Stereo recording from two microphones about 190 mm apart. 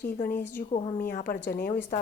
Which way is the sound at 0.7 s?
30° left (ahead or behind).